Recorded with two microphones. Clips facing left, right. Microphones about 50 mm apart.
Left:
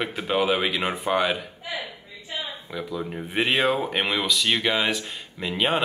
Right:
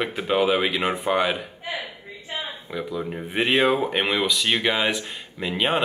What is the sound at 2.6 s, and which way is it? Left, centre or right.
Speech, centre.